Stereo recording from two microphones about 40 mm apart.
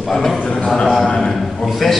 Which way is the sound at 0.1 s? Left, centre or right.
Centre.